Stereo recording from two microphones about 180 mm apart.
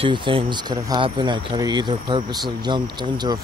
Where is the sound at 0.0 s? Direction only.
30° right (ahead or behind).